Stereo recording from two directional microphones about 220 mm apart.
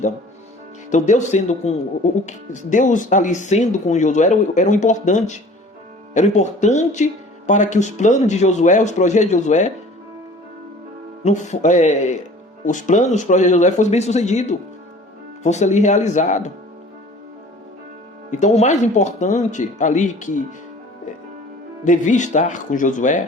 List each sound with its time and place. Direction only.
0.9 s speech: 30° left (ahead or behind)
11.2 s speech: 30° left (ahead or behind)
18.3 s speech: 30° left (ahead or behind)
21.8 s speech: 35° left (ahead or behind)